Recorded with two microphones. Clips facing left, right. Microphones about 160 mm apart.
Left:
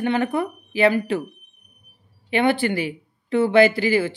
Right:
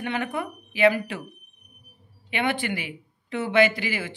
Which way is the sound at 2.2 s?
35° left (ahead or behind).